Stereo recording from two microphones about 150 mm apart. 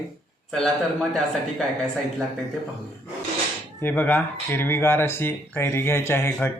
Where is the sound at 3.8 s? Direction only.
10° left (ahead or behind).